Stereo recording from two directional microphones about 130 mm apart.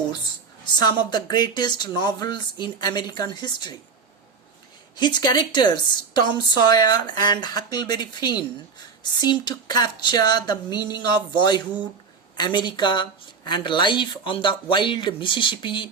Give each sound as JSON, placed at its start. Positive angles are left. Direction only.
{"t": 0.6, "sound": "a woman's voice", "side_deg": 35}
{"t": 4.9, "sound": "a woman's voice", "side_deg": 35}